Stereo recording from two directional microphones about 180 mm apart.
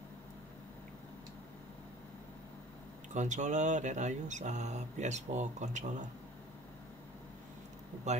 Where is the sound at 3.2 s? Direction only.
40° right (ahead or behind).